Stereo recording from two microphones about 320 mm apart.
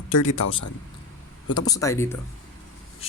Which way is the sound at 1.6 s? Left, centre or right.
Centre.